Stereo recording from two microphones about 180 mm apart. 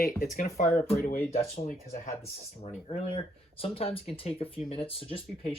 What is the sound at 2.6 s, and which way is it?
Speech, 35° left (ahead or behind).